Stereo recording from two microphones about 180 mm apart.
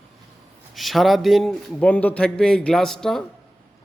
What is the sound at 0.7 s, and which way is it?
Speech, centre (ahead or behind).